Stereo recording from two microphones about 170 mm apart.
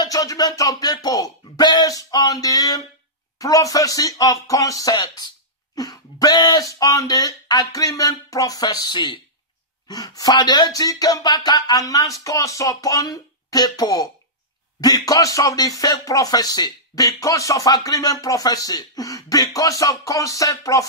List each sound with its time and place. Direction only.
0.0 s speech: 20° left (ahead or behind)